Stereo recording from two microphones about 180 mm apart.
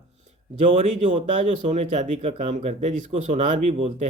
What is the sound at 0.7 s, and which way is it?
Speech, 40° right (ahead or behind).